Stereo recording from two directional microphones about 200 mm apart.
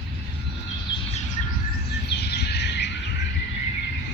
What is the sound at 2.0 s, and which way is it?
Bird, 55° left (ahead or behind).